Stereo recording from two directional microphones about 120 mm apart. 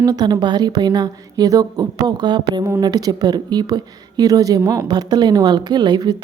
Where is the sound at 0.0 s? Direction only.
30° right (ahead or behind).